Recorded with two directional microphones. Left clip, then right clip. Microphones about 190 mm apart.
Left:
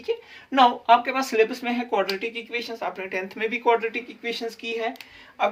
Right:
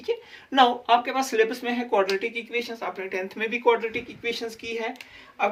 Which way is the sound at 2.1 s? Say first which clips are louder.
Right 2 dB; 10° left (ahead or behind).